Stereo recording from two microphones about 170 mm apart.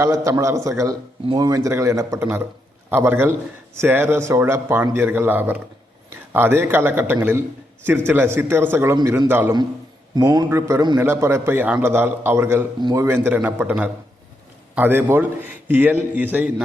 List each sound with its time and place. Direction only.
0.0 s a man's voice: 20° right (ahead or behind)